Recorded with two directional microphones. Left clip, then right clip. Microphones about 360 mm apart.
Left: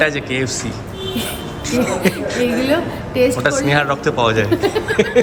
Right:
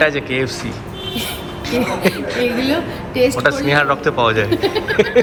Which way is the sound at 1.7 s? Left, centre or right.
Centre.